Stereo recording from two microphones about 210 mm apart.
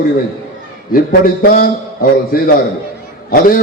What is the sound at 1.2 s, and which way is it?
A man's voice, 45° left (ahead or behind).